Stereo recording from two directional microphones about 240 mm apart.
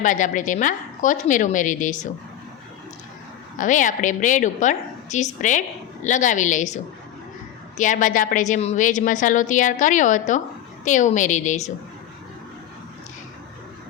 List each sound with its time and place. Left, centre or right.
0.0 s a woman's voice: left
3.6 s a woman's voice: left
7.8 s a woman's voice: left